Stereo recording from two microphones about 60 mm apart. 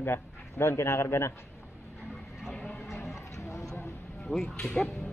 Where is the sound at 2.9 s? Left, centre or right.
Left.